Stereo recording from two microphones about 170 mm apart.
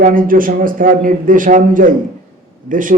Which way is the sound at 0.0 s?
55° right (ahead or behind).